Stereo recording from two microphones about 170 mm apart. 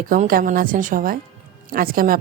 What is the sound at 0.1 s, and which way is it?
A woman's voice, 55° right (ahead or behind).